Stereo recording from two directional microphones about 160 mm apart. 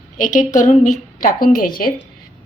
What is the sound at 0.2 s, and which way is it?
A woman's voice, 50° left (ahead or behind).